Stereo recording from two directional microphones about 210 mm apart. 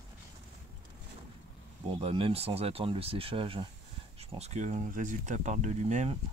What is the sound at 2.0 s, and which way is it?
Speech, 25° right (ahead or behind).